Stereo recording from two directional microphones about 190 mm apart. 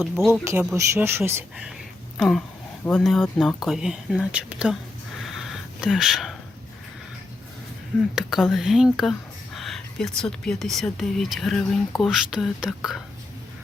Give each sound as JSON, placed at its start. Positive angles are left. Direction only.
{"t": 0.4, "sound": "speech", "side_deg": -10}
{"t": 2.1, "sound": "speech", "side_deg": 0}
{"t": 5.2, "sound": "a sound", "side_deg": 0}
{"t": 8.1, "sound": "speech", "side_deg": 0}